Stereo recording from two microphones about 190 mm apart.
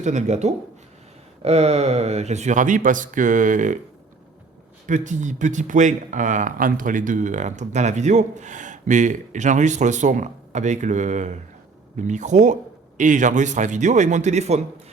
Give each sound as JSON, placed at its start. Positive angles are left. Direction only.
{"t": 0.0, "sound": "speech", "side_deg": -40}
{"t": 4.9, "sound": "speech", "side_deg": -40}